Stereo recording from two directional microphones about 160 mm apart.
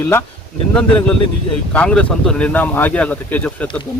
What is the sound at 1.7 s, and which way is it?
Speech, 10° left (ahead or behind).